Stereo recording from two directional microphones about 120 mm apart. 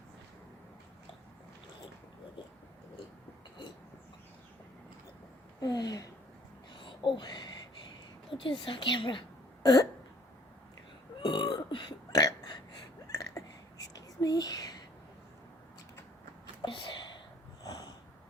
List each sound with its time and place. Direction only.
5.5 s speech: 30° left (ahead or behind)
6.7 s a sound: 40° left (ahead or behind)
8.3 s a woman's voice: 45° left (ahead or behind)
11.2 s burping: 40° left (ahead or behind)
13.1 s a sound: 25° left (ahead or behind)
13.8 s whispering: 30° left (ahead or behind)
16.6 s whispering: 45° left (ahead or behind)
17.6 s sniff: 30° left (ahead or behind)